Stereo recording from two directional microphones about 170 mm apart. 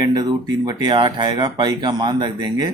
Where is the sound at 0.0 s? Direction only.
25° right (ahead or behind).